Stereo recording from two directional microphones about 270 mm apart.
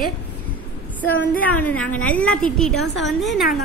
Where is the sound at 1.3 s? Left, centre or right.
Centre.